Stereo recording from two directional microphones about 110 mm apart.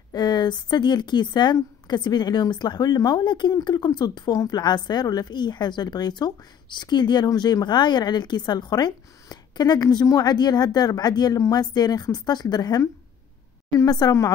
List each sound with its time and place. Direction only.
0.1 s a woman's voice: 40° left (ahead or behind)